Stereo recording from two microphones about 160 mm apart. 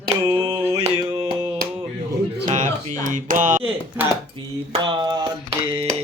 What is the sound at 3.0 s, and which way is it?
Speech, 55° right (ahead or behind).